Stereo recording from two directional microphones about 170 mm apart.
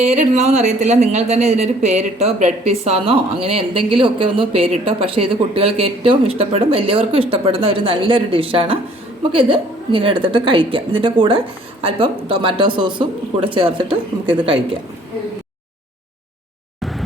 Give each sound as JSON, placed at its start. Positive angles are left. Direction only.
{"t": 0.0, "sound": "a woman's voice", "side_deg": -40}